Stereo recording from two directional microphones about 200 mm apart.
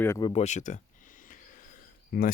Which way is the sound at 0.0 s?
15° left (ahead or behind).